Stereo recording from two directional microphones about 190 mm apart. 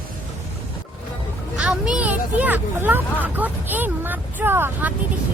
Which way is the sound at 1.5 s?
5° right (ahead or behind).